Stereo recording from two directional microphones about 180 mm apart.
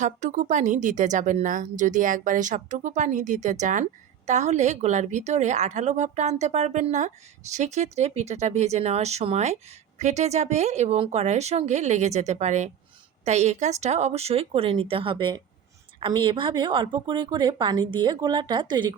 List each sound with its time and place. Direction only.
0.0 s a woman's voice: 40° right (ahead or behind); by 18.9 s 25° right (ahead or behind)